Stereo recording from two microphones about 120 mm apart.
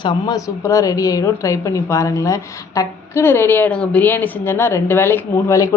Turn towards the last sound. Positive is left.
turn(degrees=25)  # may be behind; listen again after turning